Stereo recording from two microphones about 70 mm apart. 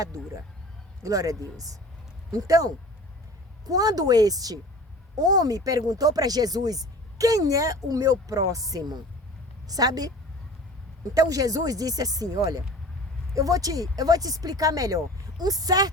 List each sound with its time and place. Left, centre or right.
1.0 s speech: right
3.7 s speech: right
11.1 s speech: right